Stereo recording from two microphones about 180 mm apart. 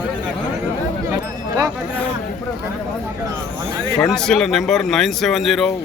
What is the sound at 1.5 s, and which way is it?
Speech, 20° right (ahead or behind).